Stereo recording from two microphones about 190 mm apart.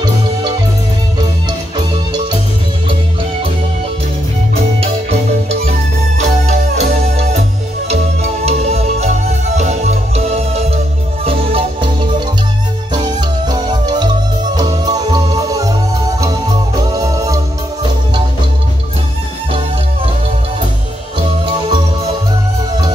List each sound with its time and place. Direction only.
6.1 s music: 35° right (ahead or behind); by 17.4 s 15° right (ahead or behind)